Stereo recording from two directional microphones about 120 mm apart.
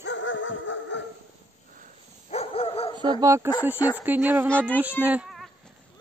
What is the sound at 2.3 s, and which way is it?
Dog, 55° left (ahead or behind).